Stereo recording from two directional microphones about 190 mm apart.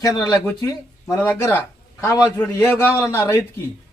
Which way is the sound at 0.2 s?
15° left (ahead or behind).